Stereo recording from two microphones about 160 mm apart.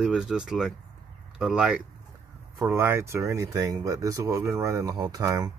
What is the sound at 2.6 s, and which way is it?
Speech, 15° right (ahead or behind).